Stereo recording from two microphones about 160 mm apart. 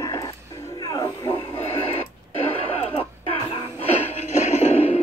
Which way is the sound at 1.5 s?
40° left (ahead or behind).